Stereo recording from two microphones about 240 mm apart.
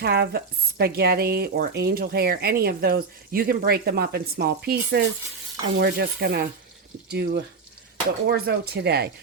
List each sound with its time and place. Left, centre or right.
0.0 s speech: right